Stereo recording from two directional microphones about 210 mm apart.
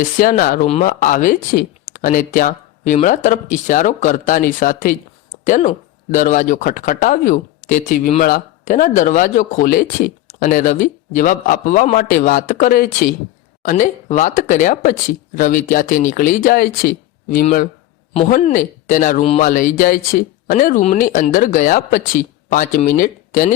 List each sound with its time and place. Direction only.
0.2 s speech: 40° left (ahead or behind)